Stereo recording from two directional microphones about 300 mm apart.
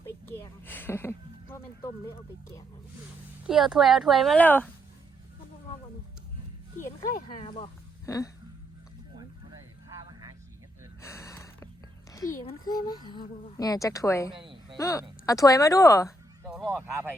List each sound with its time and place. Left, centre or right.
0.3 s a sound: centre
3.4 s speech: centre
7.3 s speech: centre
11.0 s snort: centre
12.1 s speech: centre
16.4 s speech: centre